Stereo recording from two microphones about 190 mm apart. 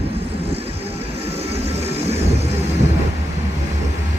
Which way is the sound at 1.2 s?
35° right (ahead or behind).